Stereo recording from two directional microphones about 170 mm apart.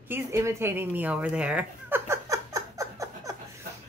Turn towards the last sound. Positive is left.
turn(degrees=-20)  # may be behind; listen again after turning